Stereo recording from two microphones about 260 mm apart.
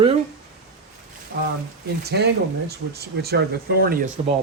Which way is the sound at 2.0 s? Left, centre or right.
Right.